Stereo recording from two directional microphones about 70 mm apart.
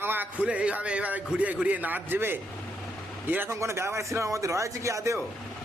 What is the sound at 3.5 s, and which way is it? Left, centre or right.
A man's voice, right.